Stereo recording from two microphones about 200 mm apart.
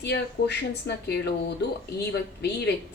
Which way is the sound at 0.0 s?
55° left (ahead or behind).